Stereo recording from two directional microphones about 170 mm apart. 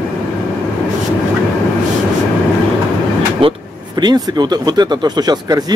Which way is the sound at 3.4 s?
30° right (ahead or behind).